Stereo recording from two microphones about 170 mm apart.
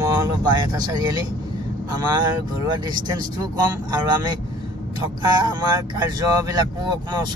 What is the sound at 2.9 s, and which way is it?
Speech, 25° right (ahead or behind).